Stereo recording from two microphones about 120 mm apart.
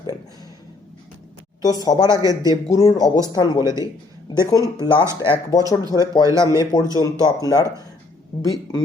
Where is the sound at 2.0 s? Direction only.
30° right (ahead or behind).